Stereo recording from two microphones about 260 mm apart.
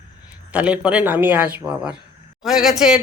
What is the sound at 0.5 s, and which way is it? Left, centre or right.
Speech, centre.